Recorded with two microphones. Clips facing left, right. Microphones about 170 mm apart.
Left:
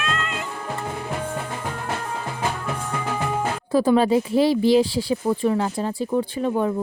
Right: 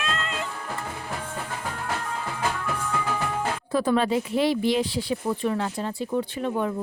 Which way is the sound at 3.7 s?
35° left (ahead or behind).